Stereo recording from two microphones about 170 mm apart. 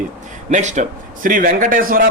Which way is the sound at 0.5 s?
45° right (ahead or behind).